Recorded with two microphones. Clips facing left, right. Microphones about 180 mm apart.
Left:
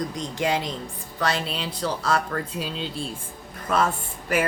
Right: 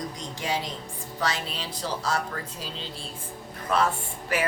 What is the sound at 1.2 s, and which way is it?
Speech, 60° left (ahead or behind).